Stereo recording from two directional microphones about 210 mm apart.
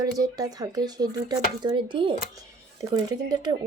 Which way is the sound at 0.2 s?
15° right (ahead or behind).